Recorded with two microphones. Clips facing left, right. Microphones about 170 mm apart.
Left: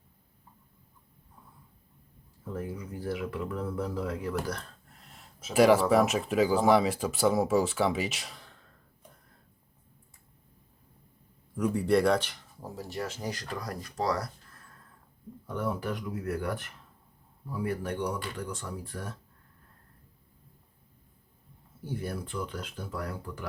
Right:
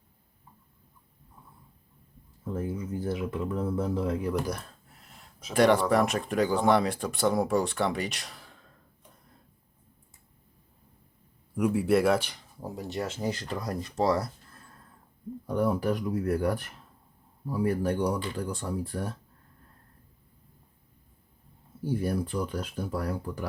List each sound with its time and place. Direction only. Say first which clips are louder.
2.4 s speech: right 4 dB; 25° right (ahead or behind)
4.9 s speech: even; centre (ahead or behind)
11.5 s speech: right 1 dB; 5° right (ahead or behind); by 14.6 s 25° right (ahead or behind)
15.4 s speech: right 6 dB; 35° right (ahead or behind)
22.0 s speech: right 4 dB; 35° right (ahead or behind)